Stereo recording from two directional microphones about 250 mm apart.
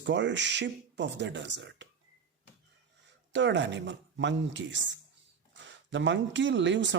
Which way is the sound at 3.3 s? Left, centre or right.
Right.